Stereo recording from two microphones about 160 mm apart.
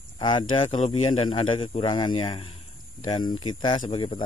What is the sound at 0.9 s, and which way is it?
Speech, 30° left (ahead or behind).